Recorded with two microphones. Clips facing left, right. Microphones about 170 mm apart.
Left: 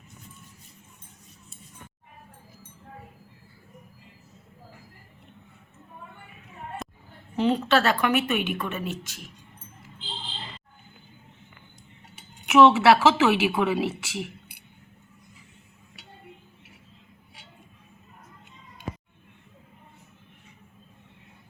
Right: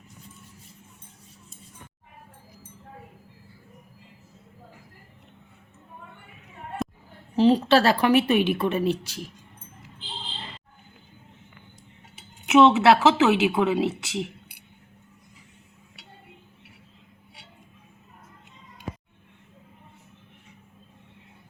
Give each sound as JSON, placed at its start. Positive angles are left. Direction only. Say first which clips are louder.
{"t": 6.8, "sound": "a sound", "louder": "right 9 dB", "side_deg": 0}
{"t": 7.3, "sound": "a woman's voice", "louder": "right 4 dB", "side_deg": -35}
{"t": 12.5, "sound": "a woman's voice", "louder": "even", "side_deg": -20}